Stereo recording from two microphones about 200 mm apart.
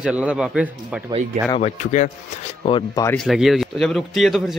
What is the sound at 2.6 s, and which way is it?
Speech, 25° left (ahead or behind).